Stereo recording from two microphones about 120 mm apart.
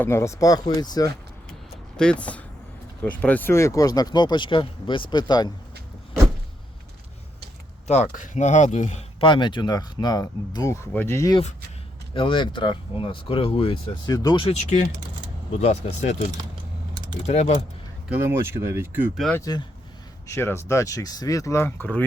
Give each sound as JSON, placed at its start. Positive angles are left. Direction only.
{"t": 0.0, "sound": "speech", "side_deg": 20}
{"t": 2.0, "sound": "speech", "side_deg": 10}
{"t": 7.9, "sound": "speech", "side_deg": 80}
{"t": 9.2, "sound": "speech", "side_deg": 40}
{"t": 12.1, "sound": "speech", "side_deg": 45}
{"t": 14.1, "sound": "speech", "side_deg": 30}
{"t": 14.6, "sound": "speech", "side_deg": 85}
{"t": 17.2, "sound": "speech", "side_deg": 70}
{"t": 18.1, "sound": "speech", "side_deg": -20}
{"t": 20.2, "sound": "speech", "side_deg": 20}